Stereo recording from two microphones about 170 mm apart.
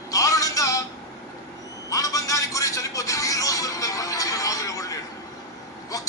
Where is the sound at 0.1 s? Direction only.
20° left (ahead or behind).